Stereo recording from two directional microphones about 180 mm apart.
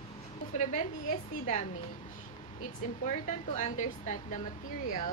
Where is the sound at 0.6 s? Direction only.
45° left (ahead or behind).